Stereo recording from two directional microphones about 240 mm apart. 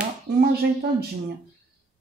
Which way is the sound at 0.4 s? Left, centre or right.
Right.